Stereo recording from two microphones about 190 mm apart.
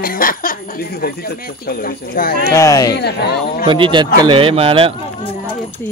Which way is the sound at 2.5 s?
15° left (ahead or behind).